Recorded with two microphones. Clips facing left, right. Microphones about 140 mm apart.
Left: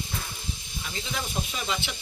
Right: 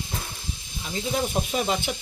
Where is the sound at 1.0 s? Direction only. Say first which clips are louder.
Right 8 dB; 40° right (ahead or behind).